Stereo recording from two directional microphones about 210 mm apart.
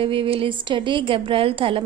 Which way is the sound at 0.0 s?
25° right (ahead or behind).